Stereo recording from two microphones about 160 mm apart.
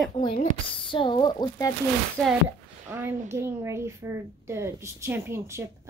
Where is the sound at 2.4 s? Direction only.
15° right (ahead or behind).